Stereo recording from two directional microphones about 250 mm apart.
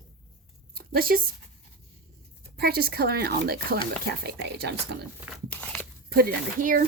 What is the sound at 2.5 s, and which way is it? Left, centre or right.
Speech, right.